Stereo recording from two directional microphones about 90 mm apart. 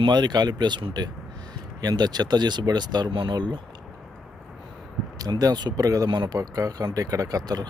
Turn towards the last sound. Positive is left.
turn(degrees=-45)  # may be behind; listen again after turning